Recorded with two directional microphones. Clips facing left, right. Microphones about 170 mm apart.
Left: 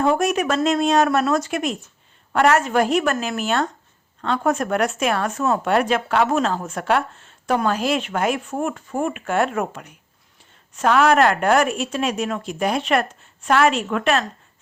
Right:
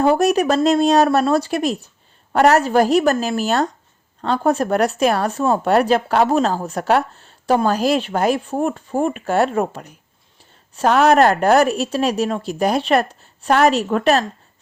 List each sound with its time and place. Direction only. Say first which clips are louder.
0.0 s speech: right 4 dB; 35° right (ahead or behind)